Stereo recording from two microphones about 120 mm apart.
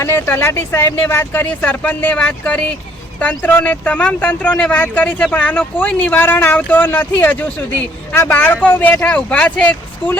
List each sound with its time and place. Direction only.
0.0 s speech: 20° left (ahead or behind)